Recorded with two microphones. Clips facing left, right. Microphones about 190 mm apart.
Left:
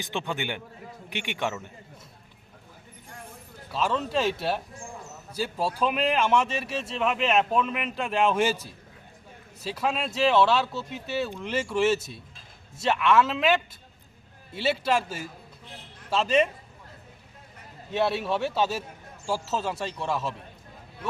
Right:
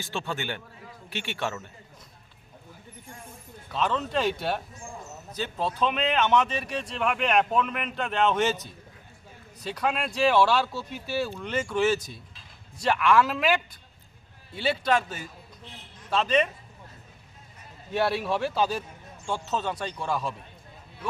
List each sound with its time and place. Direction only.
0.0 s speech: 15° left (ahead or behind)
3.7 s speech: 5° left (ahead or behind)
17.9 s speech: centre (ahead or behind)